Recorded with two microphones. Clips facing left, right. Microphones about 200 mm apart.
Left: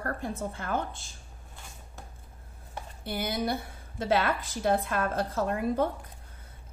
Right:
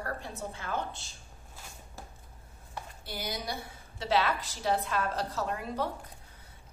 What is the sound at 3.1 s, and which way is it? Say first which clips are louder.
A woman's voice: left 7 dB; 55° left (ahead or behind).